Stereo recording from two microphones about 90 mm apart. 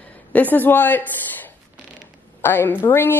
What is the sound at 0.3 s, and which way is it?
A woman's voice, 20° left (ahead or behind).